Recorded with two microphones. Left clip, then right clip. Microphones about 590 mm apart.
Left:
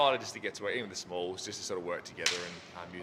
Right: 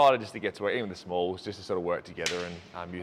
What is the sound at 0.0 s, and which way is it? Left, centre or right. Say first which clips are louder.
Speech: right 6 dB; right.